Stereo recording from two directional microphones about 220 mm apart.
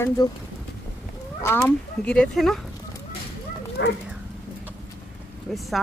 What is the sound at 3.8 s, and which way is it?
Dog, 50° left (ahead or behind).